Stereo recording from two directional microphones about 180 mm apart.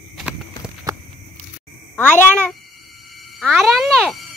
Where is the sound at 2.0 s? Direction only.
10° left (ahead or behind).